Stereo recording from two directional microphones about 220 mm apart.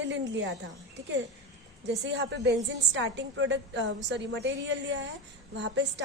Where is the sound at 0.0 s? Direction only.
55° right (ahead or behind).